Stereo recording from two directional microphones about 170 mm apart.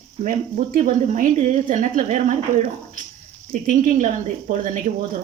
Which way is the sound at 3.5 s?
50° right (ahead or behind).